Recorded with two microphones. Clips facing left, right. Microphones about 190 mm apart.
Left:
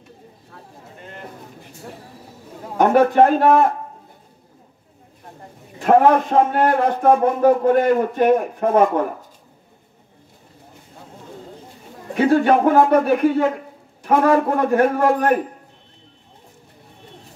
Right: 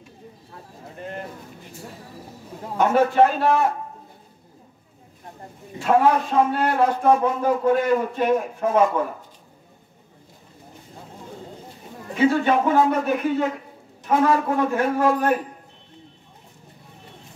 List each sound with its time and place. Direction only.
2.8 s a man's voice: 55° left (ahead or behind)
5.9 s a man's voice: 55° left (ahead or behind)
12.2 s a man's voice: 55° left (ahead or behind)